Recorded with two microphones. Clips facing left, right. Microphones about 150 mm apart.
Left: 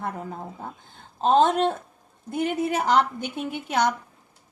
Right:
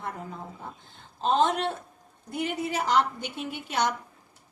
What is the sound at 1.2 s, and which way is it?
A woman's voice, 50° left (ahead or behind).